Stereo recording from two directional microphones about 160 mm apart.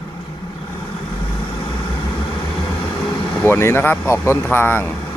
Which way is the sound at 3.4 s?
15° left (ahead or behind).